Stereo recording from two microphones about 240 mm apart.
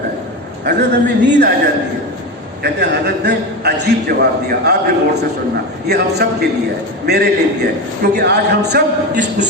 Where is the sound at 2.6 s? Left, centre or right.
Right.